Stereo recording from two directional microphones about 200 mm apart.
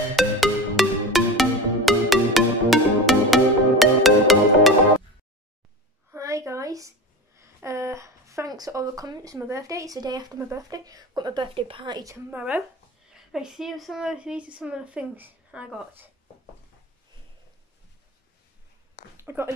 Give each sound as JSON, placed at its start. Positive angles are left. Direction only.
{"t": 0.1, "sound": "music", "side_deg": 0}
{"t": 6.1, "sound": "a sound", "side_deg": -15}
{"t": 7.3, "sound": "a woman's voice", "side_deg": -15}
{"t": 19.1, "sound": "speech", "side_deg": -10}